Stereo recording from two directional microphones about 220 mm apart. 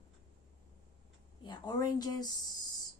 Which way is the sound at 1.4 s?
20° left (ahead or behind).